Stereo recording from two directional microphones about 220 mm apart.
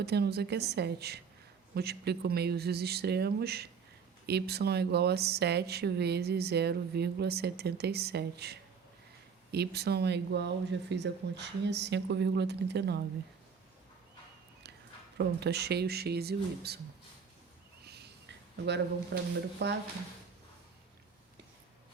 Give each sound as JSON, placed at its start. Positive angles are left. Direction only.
{"t": 0.0, "sound": "speech", "side_deg": -45}
{"t": 15.4, "sound": "speech", "side_deg": -50}
{"t": 17.8, "sound": "a sound", "side_deg": -50}